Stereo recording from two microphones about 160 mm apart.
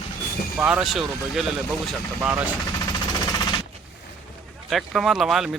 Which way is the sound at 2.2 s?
10° right (ahead or behind).